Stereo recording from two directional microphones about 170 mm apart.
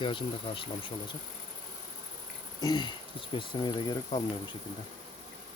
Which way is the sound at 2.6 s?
25° left (ahead or behind).